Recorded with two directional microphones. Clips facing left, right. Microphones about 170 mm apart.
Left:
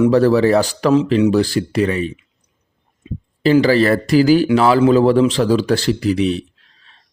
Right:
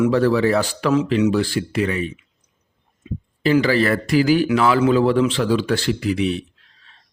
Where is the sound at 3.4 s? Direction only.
35° left (ahead or behind).